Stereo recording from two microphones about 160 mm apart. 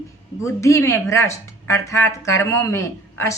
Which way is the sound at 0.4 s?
20° left (ahead or behind).